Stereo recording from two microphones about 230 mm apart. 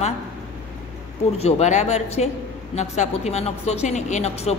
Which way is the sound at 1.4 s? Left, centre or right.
Left.